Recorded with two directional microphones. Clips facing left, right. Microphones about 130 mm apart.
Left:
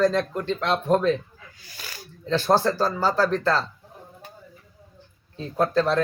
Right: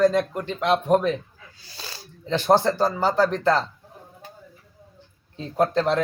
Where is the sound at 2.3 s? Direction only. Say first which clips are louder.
Right 1 dB; 20° right (ahead or behind).